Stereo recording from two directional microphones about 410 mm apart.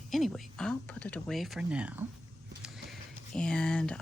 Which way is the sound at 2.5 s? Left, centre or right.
Centre.